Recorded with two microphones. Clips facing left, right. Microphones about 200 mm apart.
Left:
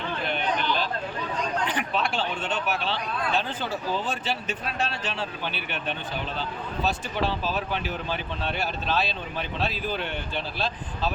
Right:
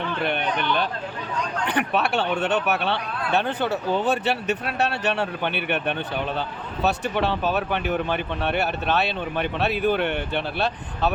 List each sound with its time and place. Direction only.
0.3 s speech: 60° right (ahead or behind)